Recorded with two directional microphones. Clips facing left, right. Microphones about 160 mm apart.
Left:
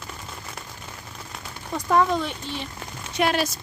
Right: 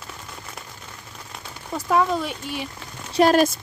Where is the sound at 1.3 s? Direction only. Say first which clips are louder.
Even; 5° right (ahead or behind).